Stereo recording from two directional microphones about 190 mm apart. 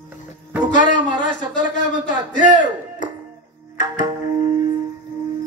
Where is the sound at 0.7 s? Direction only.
40° left (ahead or behind).